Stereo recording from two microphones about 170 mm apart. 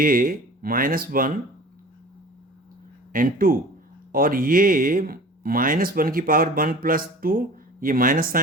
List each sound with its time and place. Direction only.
0.0 s speech: 55° right (ahead or behind)
3.1 s speech: 55° right (ahead or behind)